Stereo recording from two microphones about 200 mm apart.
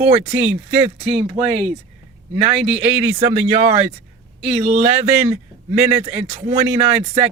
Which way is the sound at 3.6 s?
35° right (ahead or behind).